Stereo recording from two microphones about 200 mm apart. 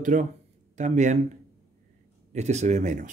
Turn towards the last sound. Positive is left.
turn(degrees=-35)  # may be behind; listen again after turning